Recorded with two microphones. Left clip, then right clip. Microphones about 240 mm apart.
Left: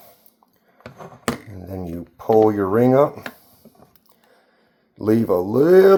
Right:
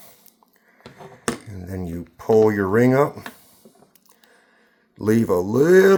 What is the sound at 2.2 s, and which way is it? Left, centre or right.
Speech, right.